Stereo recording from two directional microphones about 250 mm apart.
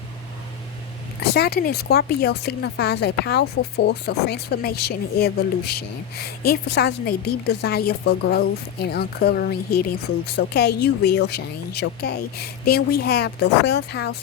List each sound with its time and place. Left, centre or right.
1.3 s speech: left